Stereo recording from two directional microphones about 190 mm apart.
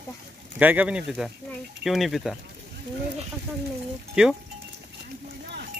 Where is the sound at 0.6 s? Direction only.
10° right (ahead or behind).